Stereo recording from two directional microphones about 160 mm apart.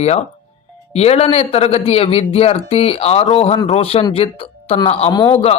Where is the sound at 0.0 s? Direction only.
40° left (ahead or behind).